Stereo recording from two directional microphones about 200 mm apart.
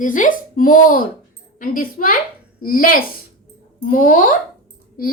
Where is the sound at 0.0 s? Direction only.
40° left (ahead or behind).